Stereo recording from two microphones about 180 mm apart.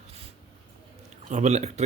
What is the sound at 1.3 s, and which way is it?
Speech, 40° right (ahead or behind).